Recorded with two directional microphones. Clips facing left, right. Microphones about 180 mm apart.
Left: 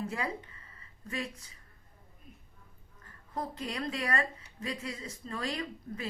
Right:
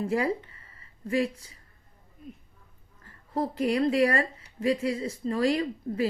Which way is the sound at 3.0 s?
30° right (ahead or behind).